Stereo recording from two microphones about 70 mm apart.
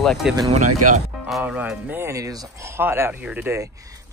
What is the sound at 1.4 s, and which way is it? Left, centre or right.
Music, right.